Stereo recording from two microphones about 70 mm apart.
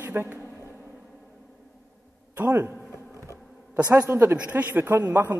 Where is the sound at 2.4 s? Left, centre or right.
Right.